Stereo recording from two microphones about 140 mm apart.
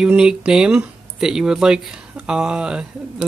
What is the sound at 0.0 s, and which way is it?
Speech, 5° right (ahead or behind).